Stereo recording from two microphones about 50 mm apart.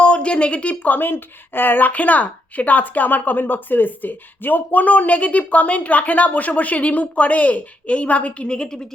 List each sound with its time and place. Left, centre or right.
0.0 s a woman's voice: left
0.9 s speech: left; by 8.8 s centre